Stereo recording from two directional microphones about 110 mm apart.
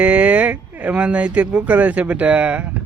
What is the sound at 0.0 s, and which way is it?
Speech, 10° right (ahead or behind).